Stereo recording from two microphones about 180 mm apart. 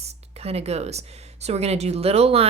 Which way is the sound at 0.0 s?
35° right (ahead or behind).